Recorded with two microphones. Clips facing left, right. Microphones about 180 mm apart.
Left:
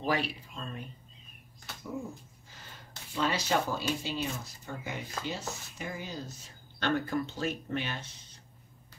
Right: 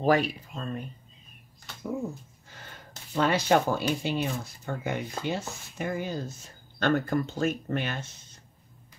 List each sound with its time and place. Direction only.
0.0 s speech: 45° right (ahead or behind)
3.2 s speech: 55° right (ahead or behind)